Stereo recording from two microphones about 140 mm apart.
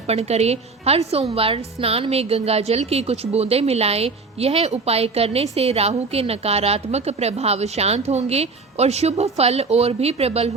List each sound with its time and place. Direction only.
0.1 s a woman's voice: 50° right (ahead or behind)